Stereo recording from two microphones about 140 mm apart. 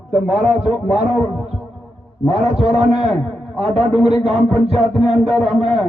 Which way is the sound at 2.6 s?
5° right (ahead or behind).